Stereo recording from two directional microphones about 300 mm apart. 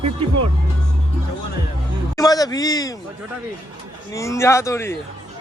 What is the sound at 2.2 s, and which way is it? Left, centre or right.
Speech, centre.